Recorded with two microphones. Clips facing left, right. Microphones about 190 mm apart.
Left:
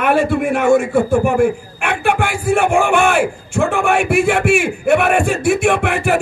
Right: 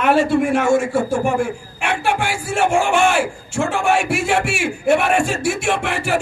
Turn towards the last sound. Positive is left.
turn(degrees=55)  # may be behind; listen again after turning